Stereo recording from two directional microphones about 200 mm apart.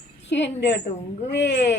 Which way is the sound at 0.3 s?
65° left (ahead or behind).